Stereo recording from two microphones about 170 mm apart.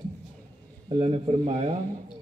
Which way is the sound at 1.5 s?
25° right (ahead or behind).